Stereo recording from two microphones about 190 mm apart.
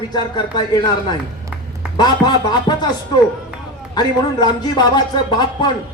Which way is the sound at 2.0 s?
20° left (ahead or behind).